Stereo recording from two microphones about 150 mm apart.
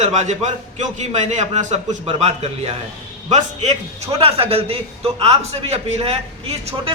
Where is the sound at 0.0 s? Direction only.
50° right (ahead or behind).